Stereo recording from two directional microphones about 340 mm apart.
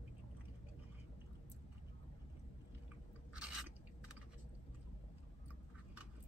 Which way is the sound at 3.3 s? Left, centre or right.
Centre.